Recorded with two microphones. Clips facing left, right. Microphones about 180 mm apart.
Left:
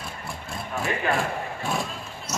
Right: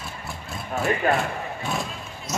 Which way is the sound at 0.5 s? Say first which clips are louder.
Right 4 dB; centre (ahead or behind).